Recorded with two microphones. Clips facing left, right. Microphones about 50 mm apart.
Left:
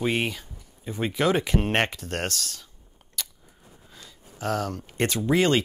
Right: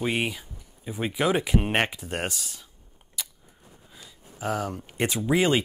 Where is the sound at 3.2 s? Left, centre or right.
Centre.